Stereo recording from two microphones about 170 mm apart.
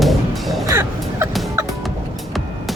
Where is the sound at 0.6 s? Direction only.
15° right (ahead or behind).